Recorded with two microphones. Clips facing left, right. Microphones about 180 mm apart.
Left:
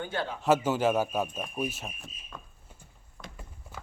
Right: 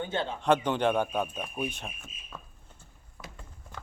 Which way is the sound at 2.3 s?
5° right (ahead or behind).